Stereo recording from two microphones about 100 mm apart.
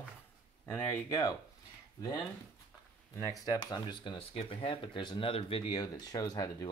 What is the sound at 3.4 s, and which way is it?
Speech, 40° left (ahead or behind).